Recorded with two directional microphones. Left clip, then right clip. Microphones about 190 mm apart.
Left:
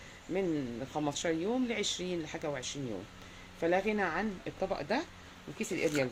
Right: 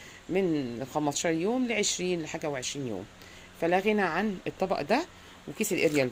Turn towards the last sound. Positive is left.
turn(degrees=-55)  # may be behind; listen again after turning